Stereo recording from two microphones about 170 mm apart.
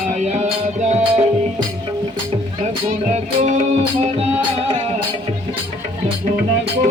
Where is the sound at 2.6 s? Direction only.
45° right (ahead or behind).